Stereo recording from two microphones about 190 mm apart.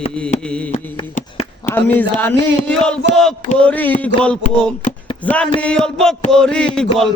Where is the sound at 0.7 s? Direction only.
40° left (ahead or behind).